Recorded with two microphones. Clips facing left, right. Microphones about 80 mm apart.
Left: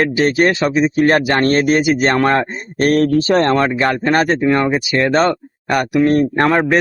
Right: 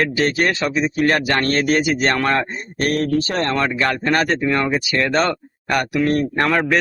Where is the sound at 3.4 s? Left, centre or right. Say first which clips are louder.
Left 5 dB; left.